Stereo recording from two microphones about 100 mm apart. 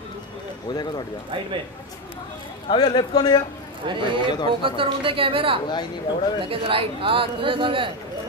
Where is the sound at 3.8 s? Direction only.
55° right (ahead or behind).